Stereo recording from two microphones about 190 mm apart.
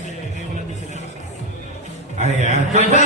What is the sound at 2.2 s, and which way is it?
Speech, 35° right (ahead or behind).